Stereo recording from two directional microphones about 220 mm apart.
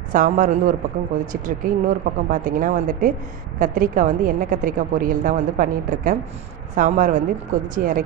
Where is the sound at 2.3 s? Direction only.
35° right (ahead or behind).